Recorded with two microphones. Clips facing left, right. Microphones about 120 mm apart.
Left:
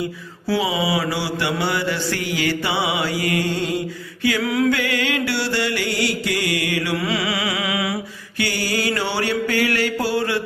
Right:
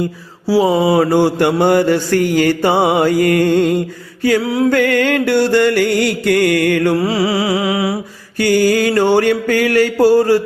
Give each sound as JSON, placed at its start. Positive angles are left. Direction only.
{"t": 0.6, "sound": "mantra", "side_deg": -50}
{"t": 4.7, "sound": "mantra", "side_deg": -50}
{"t": 8.4, "sound": "mantra", "side_deg": -45}